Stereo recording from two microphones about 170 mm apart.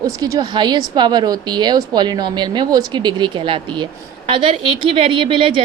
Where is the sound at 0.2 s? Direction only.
25° right (ahead or behind).